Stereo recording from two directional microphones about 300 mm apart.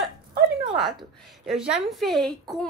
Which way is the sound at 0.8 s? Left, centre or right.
Centre.